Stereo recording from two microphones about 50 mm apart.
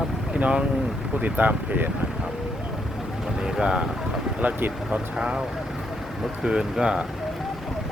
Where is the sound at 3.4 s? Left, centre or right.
Centre.